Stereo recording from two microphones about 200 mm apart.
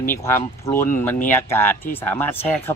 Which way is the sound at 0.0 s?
10° left (ahead or behind).